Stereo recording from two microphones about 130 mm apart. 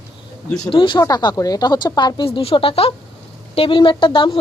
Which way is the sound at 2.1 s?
45° left (ahead or behind).